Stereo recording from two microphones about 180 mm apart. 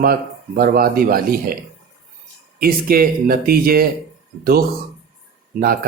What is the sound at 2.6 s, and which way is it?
Speech, 55° right (ahead or behind).